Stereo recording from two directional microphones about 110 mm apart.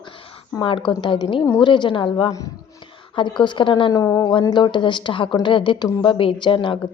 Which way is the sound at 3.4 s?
45° left (ahead or behind).